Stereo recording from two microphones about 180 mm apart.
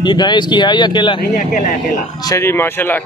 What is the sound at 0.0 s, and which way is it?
Speech, 25° left (ahead or behind).